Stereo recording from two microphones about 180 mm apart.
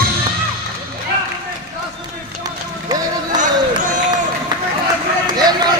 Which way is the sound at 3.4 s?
45° right (ahead or behind).